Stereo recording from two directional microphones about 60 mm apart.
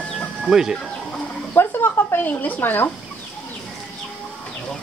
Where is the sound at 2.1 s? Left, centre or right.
Left.